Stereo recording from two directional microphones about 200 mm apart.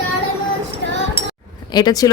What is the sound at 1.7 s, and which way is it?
Speech, 20° left (ahead or behind).